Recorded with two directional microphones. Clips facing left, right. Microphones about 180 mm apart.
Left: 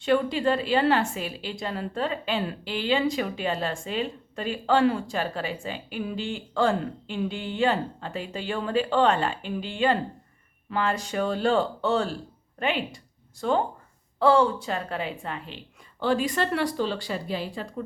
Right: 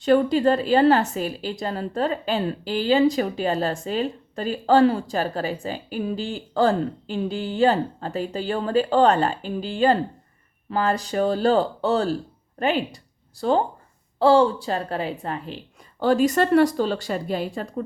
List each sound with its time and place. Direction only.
0.0 s a woman's voice: 40° right (ahead or behind)